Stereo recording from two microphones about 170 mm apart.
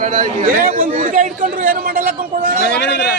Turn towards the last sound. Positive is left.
turn(degrees=85)